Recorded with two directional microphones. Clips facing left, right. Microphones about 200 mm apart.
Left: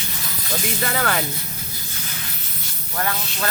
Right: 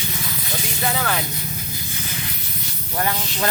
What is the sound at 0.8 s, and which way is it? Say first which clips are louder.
Speech: right 1 dB; 55° left (ahead or behind).